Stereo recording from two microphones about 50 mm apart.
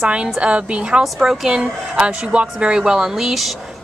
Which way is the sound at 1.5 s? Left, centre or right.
Centre.